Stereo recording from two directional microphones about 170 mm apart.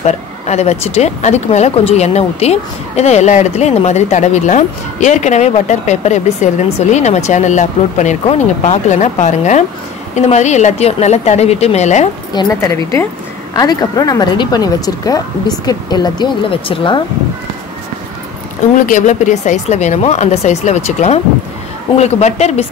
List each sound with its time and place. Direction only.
0.0 s speech: 40° left (ahead or behind)
12.4 s speech: 20° left (ahead or behind)
18.9 s speech: 50° left (ahead or behind)